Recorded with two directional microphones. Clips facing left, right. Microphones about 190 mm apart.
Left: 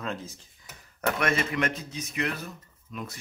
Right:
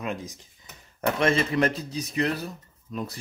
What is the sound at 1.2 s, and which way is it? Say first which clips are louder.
A man's voice: right 6 dB; 30° right (ahead or behind).